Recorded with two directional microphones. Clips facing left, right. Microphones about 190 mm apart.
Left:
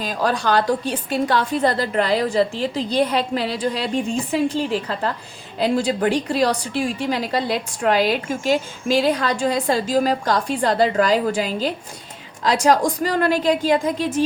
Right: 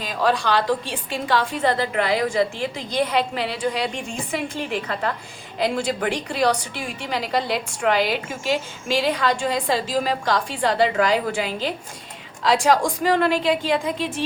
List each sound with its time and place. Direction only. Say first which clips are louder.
0.0 s a woman's voice: even; 40° left (ahead or behind)